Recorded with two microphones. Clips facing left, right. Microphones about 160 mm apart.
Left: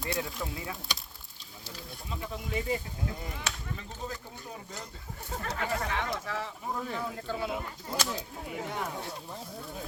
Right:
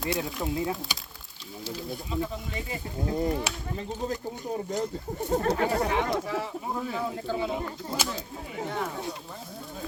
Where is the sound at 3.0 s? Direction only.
40° right (ahead or behind).